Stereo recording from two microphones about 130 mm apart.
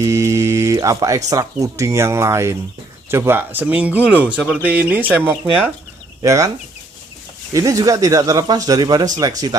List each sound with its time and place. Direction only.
0.0 s a sound: 25° right (ahead or behind)
1.3 s speech: 25° right (ahead or behind)
6.2 s speech: 25° right (ahead or behind)
7.5 s speech: 25° right (ahead or behind)